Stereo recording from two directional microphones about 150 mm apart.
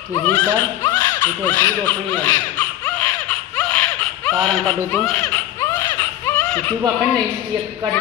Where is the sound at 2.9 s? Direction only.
10° left (ahead or behind).